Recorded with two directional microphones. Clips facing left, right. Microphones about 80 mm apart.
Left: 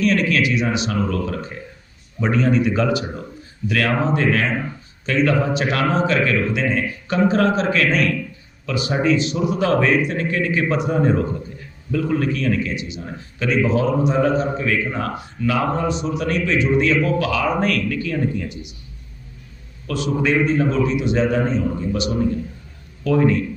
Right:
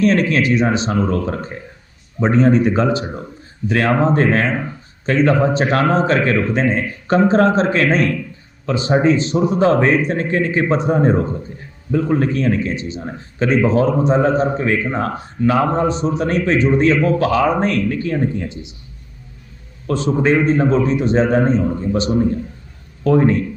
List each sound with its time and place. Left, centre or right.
0.0 s speech: right
19.9 s speech: right